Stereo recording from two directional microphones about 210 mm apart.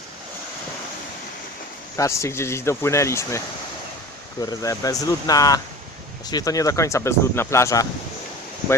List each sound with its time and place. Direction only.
2.0 s speech: 15° left (ahead or behind)